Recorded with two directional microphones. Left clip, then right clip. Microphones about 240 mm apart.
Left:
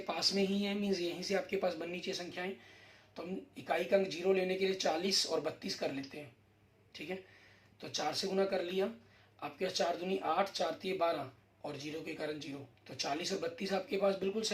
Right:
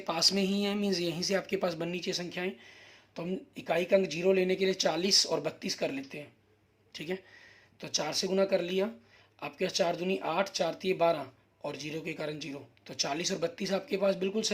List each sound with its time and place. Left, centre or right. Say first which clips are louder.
0.0 s speech: right 5 dB; right